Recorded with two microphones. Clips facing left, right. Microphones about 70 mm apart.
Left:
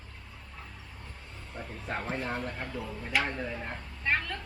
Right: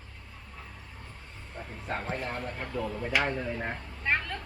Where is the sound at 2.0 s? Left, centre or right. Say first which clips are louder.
Even; centre.